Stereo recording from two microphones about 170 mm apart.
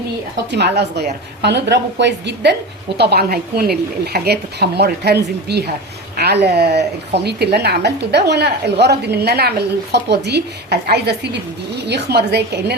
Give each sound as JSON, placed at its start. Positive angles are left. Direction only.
{"t": 0.5, "sound": "a woman's voice", "side_deg": -80}
{"t": 3.0, "sound": "a woman's voice", "side_deg": -70}